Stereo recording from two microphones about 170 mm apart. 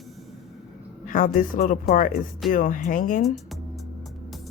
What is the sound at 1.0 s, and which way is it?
Speech, 55° left (ahead or behind).